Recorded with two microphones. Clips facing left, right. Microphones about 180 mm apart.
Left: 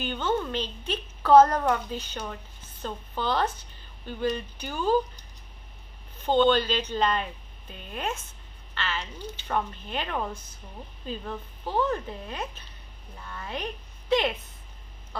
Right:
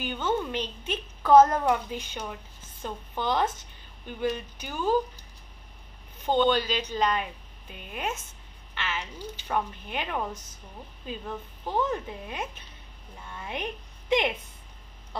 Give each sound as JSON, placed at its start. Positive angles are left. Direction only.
{"t": 0.0, "sound": "speech", "side_deg": -10}
{"t": 6.2, "sound": "a woman's voice", "side_deg": -10}